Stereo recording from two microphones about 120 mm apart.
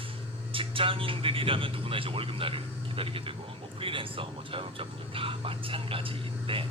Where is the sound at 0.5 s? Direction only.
50° right (ahead or behind).